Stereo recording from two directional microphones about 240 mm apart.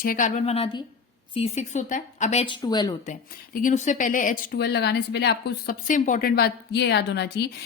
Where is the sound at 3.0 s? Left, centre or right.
Left.